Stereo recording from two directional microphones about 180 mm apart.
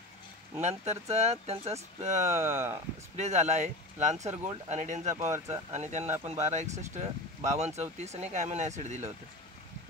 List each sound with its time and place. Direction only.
0.6 s speech: 40° right (ahead or behind)
2.3 s speech: 15° right (ahead or behind)
3.2 s speech: 40° right (ahead or behind)
5.1 s speech: 15° right (ahead or behind)
5.5 s speech: 40° right (ahead or behind)